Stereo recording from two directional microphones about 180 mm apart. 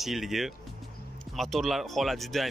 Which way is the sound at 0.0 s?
Centre (ahead or behind).